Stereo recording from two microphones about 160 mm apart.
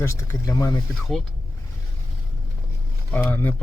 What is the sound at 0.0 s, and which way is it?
Speech, 15° left (ahead or behind).